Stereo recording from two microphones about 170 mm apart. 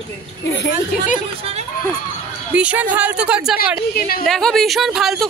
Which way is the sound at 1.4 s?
40° right (ahead or behind).